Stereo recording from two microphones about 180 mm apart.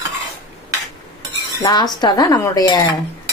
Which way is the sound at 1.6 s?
20° left (ahead or behind).